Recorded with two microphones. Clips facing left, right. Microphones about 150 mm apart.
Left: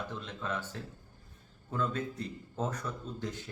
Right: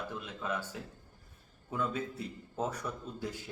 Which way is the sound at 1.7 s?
10° right (ahead or behind).